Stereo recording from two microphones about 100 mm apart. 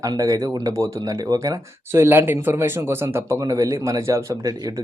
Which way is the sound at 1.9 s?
25° right (ahead or behind).